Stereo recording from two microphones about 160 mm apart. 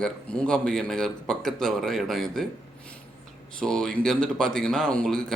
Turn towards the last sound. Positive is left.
turn(degrees=5)  # may be behind; listen again after turning